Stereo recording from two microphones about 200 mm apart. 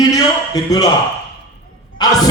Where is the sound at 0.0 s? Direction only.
20° left (ahead or behind).